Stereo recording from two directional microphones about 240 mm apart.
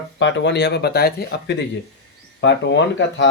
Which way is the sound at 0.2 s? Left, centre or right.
Left.